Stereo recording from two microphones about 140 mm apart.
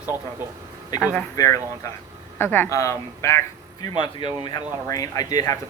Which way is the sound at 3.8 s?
35° left (ahead or behind).